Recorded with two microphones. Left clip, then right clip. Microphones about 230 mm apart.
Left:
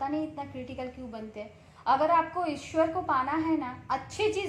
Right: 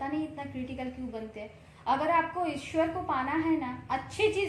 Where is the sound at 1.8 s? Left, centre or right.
Left.